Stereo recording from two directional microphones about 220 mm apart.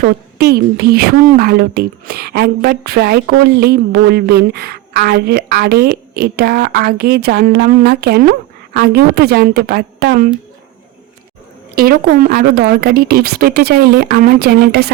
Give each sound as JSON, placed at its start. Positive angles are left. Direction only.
{"t": 0.0, "sound": "a woman's voice", "side_deg": -45}
{"t": 11.7, "sound": "a woman's voice", "side_deg": -45}